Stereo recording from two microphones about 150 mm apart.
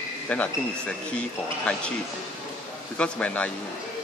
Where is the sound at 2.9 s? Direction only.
10° left (ahead or behind).